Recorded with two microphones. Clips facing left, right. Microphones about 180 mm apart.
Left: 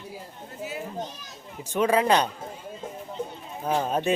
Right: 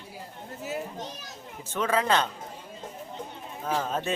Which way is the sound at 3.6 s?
15° left (ahead or behind).